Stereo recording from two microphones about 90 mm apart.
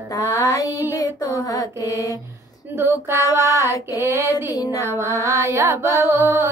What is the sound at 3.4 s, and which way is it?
Music, 35° right (ahead or behind).